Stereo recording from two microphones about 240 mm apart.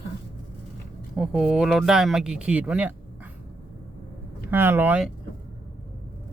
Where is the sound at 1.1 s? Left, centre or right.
Centre.